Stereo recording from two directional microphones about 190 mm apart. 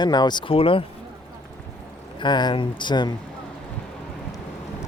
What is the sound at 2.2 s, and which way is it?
Speech, 25° left (ahead or behind).